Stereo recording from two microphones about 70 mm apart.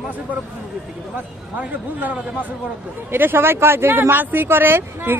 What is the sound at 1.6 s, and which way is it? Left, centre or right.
A man's voice, right.